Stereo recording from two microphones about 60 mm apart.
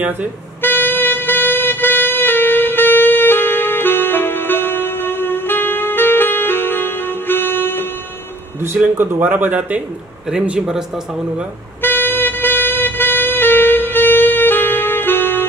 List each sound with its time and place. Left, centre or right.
0.6 s wind instrument: left
8.9 s speech: right
11.8 s wind instrument: left